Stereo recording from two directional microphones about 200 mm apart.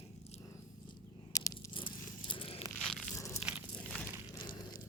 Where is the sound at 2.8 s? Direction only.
Centre (ahead or behind).